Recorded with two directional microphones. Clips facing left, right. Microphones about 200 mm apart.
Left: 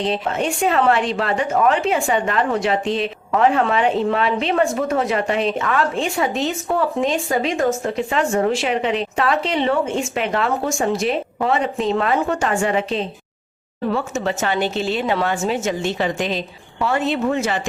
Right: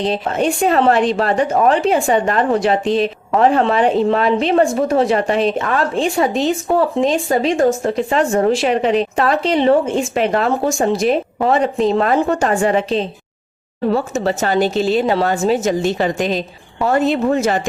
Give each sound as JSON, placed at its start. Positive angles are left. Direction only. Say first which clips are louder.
{"t": 0.1, "sound": "a woman's voice", "louder": "right 4 dB", "side_deg": -40}